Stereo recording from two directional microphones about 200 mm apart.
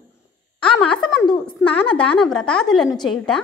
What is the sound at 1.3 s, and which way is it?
Speech, 25° left (ahead or behind).